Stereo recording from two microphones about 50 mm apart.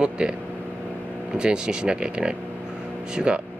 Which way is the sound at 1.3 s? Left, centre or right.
Centre.